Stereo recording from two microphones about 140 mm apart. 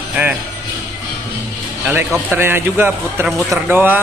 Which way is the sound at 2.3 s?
15° right (ahead or behind).